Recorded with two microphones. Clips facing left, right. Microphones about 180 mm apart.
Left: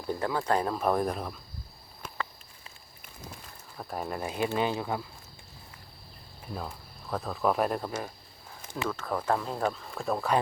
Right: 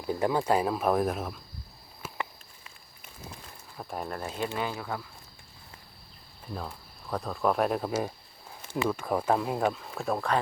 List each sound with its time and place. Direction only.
0.1 s speech: 15° right (ahead or behind)
3.8 s speech: centre (ahead or behind)
4.2 s speech: 15° left (ahead or behind)
6.5 s speech: centre (ahead or behind)
7.9 s speech: 15° right (ahead or behind)